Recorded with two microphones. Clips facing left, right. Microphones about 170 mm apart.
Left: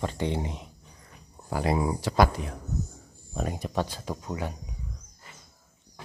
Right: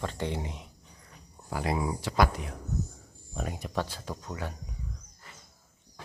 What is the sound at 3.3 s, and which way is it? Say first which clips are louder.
Speech: left 4 dB; 35° left (ahead or behind).